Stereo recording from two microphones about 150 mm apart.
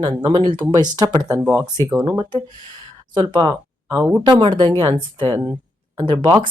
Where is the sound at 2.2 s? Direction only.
30° right (ahead or behind).